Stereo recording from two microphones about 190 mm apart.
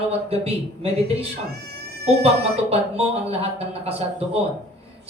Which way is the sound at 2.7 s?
30° right (ahead or behind).